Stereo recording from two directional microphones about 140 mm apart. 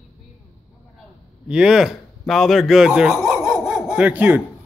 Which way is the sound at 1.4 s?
5° right (ahead or behind).